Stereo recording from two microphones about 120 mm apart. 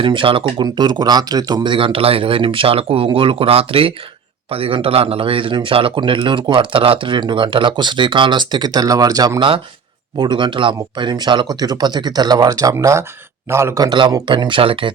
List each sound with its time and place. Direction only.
0.0 s speech: 45° right (ahead or behind)